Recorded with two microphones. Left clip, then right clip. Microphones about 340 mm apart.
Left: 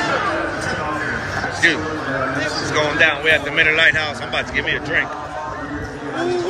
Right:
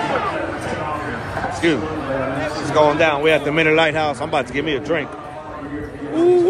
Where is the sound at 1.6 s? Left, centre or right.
Centre.